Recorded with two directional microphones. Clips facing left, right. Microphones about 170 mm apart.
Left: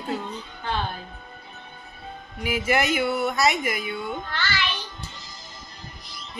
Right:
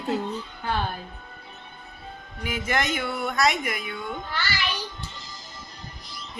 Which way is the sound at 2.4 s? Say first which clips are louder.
Left 4 dB; 10° left (ahead or behind).